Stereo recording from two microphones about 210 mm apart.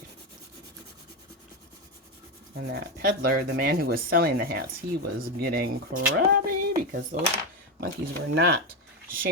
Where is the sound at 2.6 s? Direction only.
50° right (ahead or behind).